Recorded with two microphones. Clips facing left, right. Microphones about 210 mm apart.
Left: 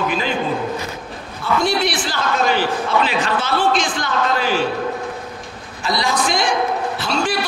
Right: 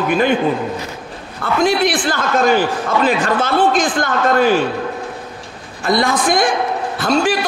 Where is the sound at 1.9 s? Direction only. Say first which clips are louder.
Right 4 dB; 50° right (ahead or behind).